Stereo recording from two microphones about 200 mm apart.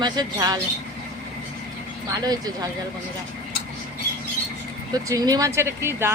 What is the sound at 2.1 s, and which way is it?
Speech, 20° right (ahead or behind).